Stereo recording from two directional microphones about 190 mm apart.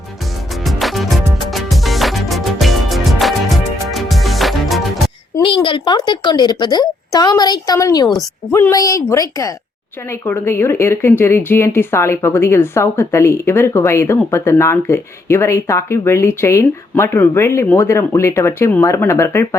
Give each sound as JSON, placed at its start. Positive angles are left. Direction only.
{"t": 0.6, "sound": "music", "side_deg": 0}
{"t": 5.4, "sound": "a woman's voice", "side_deg": 25}